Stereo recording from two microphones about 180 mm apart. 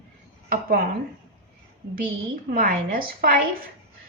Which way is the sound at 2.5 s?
55° right (ahead or behind).